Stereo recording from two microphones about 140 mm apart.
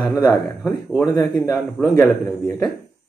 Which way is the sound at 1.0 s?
25° left (ahead or behind).